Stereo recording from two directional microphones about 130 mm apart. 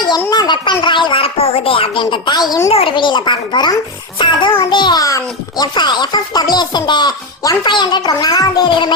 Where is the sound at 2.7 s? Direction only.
45° left (ahead or behind).